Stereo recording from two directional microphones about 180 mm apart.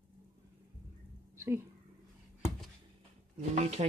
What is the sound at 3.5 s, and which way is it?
Speech, 40° right (ahead or behind).